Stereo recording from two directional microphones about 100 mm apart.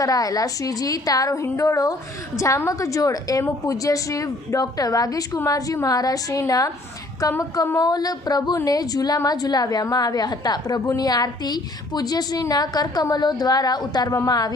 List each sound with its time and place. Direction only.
0.0 s a woman's voice: 35° left (ahead or behind)
7.8 s a woman's voice: 40° left (ahead or behind)